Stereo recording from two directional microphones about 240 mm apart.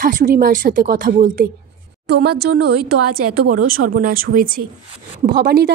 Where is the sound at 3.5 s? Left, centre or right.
Right.